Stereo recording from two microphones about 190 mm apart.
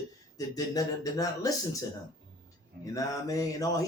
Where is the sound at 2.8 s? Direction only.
15° left (ahead or behind).